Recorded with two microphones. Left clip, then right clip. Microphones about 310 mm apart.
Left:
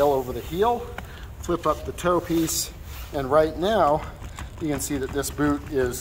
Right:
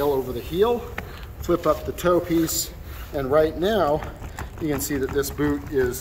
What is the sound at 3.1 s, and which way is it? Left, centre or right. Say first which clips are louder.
Speech: even; left.